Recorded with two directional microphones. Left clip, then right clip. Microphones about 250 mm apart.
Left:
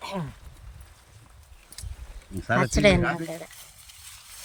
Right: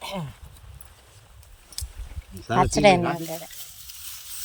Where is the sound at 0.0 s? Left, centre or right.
Right.